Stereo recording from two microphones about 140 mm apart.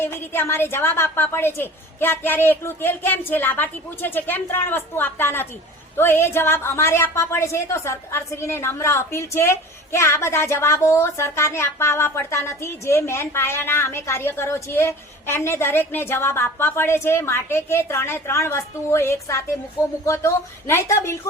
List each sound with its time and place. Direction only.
0.0 s a woman's voice: 15° left (ahead or behind)